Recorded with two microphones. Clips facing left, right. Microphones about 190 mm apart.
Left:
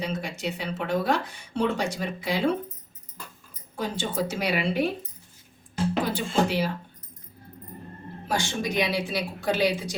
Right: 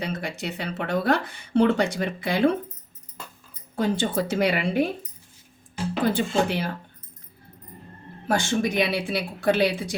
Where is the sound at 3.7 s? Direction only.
60° right (ahead or behind).